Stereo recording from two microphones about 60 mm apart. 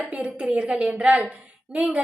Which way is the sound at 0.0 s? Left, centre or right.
Right.